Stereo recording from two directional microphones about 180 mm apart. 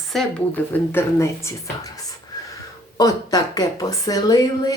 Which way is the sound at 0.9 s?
15° left (ahead or behind).